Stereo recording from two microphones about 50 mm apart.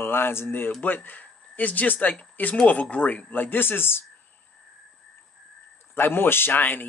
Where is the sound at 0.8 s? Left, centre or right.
Left.